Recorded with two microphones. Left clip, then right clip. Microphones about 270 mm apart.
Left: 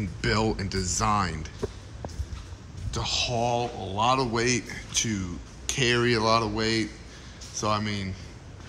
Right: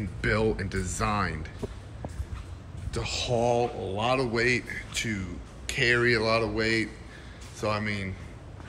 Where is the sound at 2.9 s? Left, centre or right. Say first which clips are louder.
Left 1 dB; centre.